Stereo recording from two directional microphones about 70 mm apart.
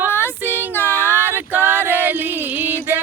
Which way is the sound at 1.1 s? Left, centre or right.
Right.